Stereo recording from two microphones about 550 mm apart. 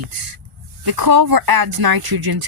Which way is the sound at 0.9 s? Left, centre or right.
Right.